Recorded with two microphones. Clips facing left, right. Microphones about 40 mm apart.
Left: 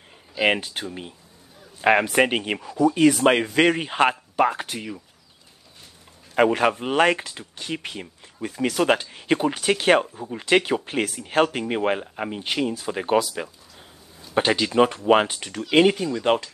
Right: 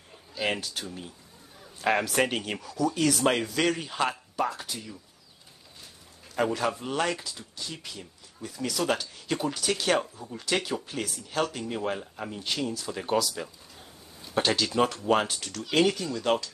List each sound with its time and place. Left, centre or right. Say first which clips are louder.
0.4 s speech: left 8 dB; left
6.3 s speech: left 8 dB; left